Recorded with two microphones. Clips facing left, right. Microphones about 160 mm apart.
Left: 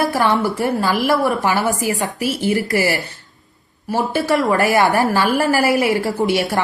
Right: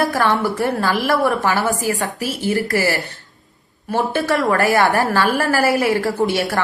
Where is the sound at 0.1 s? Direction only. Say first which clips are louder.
Left 1 dB; 15° left (ahead or behind).